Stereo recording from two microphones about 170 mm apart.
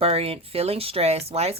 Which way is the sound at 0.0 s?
35° right (ahead or behind).